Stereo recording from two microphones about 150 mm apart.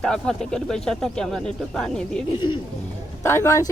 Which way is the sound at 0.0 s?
5° left (ahead or behind).